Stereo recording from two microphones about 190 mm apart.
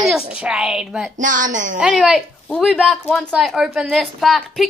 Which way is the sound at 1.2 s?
40° right (ahead or behind).